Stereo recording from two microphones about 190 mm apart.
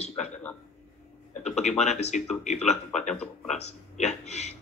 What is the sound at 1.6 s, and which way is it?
Speech, 35° left (ahead or behind).